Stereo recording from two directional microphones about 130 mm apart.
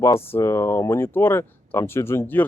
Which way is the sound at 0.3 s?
20° left (ahead or behind).